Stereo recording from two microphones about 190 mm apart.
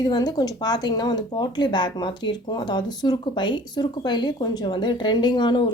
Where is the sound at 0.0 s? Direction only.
20° left (ahead or behind).